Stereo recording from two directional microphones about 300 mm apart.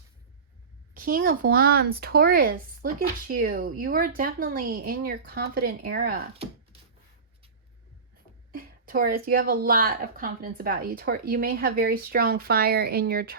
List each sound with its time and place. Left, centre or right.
0.9 s speech: right
8.5 s speech: right